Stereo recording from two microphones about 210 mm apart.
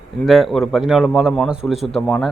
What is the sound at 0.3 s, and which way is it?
Speech, centre (ahead or behind).